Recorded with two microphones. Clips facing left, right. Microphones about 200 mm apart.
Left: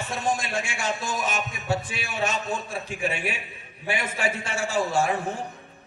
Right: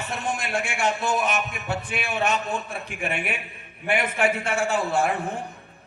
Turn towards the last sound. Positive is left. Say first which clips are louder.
# right 1 dB
turn(degrees=-60)  # may be behind; listen again after turning